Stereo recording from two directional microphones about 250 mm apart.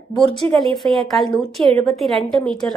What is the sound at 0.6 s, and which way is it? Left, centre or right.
Speech, centre.